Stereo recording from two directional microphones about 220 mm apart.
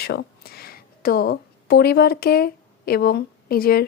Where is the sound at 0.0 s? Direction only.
45° left (ahead or behind).